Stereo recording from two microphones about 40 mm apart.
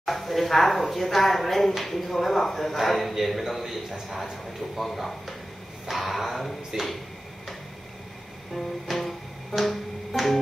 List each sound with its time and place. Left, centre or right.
0.0 s speech: centre
8.5 s music: centre